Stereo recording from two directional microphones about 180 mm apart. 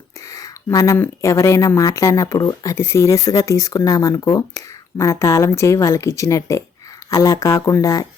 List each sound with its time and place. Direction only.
0.2 s speech: 20° left (ahead or behind)